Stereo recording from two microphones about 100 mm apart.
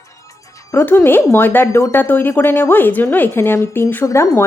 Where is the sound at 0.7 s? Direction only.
20° left (ahead or behind).